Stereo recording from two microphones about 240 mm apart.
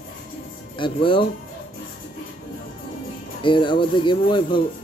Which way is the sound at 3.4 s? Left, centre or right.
Centre.